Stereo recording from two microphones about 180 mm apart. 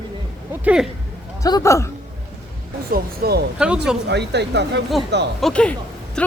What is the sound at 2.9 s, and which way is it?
Speech, 60° right (ahead or behind).